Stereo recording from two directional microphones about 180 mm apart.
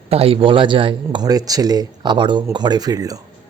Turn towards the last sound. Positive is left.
turn(degrees=-20)  # may be behind; listen again after turning